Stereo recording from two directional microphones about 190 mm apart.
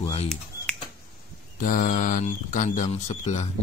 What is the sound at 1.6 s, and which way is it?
Speech, 45° left (ahead or behind).